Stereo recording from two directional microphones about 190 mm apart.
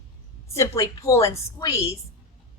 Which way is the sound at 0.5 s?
15° left (ahead or behind).